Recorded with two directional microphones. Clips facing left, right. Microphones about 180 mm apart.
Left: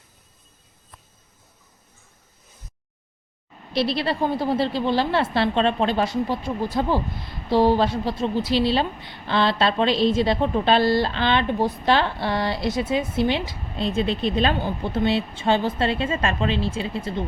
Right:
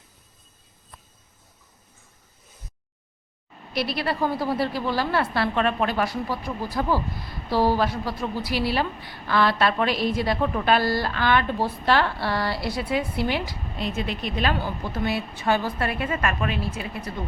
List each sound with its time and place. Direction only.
3.7 s a woman's voice: 25° left (ahead or behind)